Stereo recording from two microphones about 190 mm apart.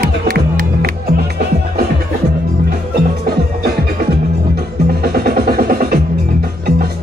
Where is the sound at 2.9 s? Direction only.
50° right (ahead or behind).